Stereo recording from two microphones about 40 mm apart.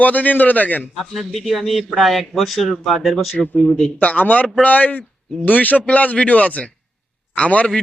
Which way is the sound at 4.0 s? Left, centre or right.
Left.